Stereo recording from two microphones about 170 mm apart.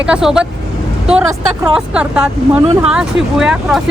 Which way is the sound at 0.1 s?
5° right (ahead or behind).